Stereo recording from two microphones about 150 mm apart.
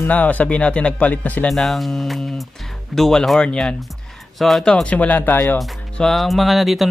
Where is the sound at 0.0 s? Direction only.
10° left (ahead or behind).